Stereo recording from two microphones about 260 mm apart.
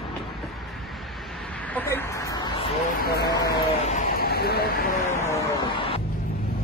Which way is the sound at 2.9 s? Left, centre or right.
Left.